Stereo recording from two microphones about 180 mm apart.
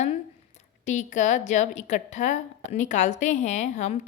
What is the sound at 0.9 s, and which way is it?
A woman's voice, 40° left (ahead or behind).